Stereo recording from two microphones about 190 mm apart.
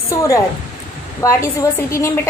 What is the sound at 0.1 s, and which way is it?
A woman's voice, 15° left (ahead or behind).